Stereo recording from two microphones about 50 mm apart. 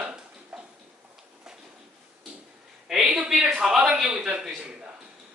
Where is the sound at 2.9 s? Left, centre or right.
Centre.